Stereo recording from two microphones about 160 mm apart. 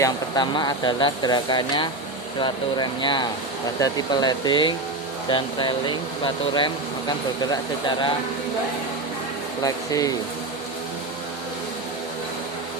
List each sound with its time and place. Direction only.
0.0 s speech: 25° left (ahead or behind)
9.6 s speech: 20° left (ahead or behind)